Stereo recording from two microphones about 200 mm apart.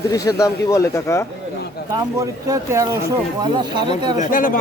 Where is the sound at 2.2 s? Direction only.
15° right (ahead or behind).